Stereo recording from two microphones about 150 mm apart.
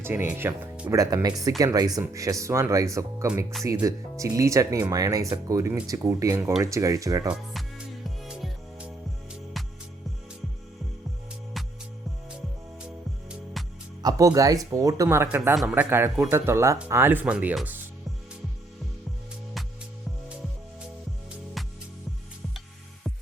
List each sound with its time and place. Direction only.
0.0 s speech: 15° right (ahead or behind)
8.0 s music: centre (ahead or behind)
11.6 s music: centre (ahead or behind)
14.0 s speech: 25° right (ahead or behind); by 17.7 s 5° right (ahead or behind)
21.6 s music: centre (ahead or behind)